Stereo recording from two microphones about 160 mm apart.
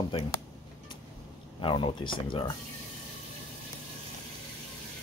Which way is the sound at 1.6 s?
30° left (ahead or behind).